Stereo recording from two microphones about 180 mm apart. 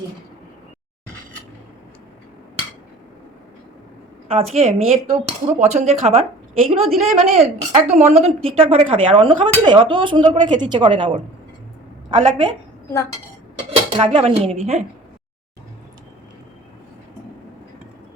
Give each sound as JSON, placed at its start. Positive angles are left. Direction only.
{"t": 4.3, "sound": "a woman's voice", "side_deg": -35}
{"t": 13.7, "sound": "speech", "side_deg": -30}